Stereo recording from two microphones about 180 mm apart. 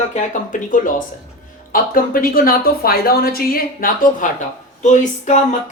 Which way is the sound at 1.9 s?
50° left (ahead or behind).